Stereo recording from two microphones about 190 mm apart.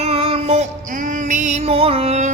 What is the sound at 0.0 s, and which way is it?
Music, 30° right (ahead or behind).